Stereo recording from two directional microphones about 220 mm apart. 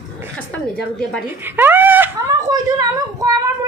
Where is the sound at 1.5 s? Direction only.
10° right (ahead or behind).